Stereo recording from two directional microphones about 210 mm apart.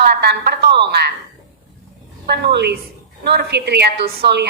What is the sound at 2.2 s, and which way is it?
A woman's voice, 50° right (ahead or behind).